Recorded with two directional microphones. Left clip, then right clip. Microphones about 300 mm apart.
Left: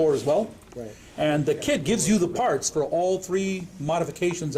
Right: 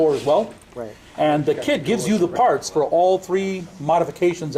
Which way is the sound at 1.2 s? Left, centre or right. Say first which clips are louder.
Right 5 dB; centre.